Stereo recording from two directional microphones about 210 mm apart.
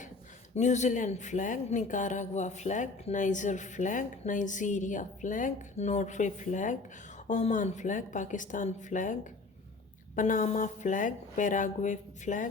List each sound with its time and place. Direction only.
0.5 s speech: 35° left (ahead or behind)
10.2 s speech: 40° left (ahead or behind)